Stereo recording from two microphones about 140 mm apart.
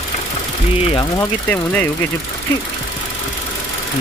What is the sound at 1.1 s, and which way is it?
Speech, 20° left (ahead or behind).